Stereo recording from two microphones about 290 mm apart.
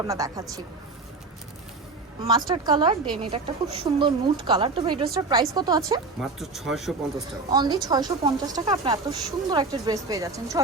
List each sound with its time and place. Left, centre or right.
0.1 s speech: centre
2.2 s speech: centre
6.1 s speech: centre
7.5 s speech: centre